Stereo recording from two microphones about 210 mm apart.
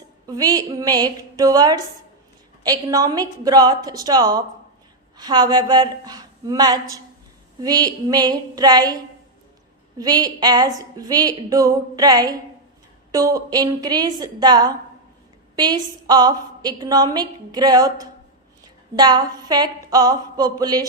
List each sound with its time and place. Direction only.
0.3 s a woman's voice: 20° right (ahead or behind)
10.0 s a woman's voice: 20° right (ahead or behind)